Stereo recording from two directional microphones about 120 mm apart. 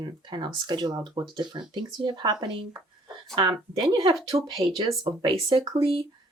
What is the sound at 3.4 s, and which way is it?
Speech, 40° right (ahead or behind).